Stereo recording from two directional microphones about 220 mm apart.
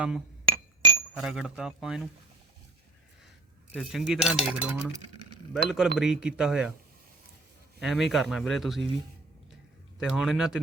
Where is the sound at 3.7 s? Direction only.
Centre (ahead or behind).